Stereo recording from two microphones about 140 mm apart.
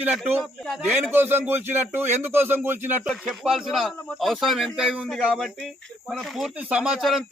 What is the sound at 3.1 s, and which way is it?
Speech, centre (ahead or behind).